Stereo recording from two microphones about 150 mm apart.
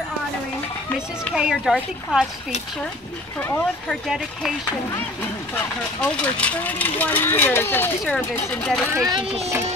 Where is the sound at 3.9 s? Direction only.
Centre (ahead or behind).